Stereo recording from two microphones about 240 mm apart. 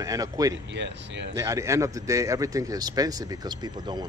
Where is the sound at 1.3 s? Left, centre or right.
Centre.